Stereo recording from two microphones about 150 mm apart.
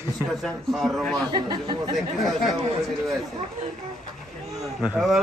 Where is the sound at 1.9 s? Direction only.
Centre (ahead or behind).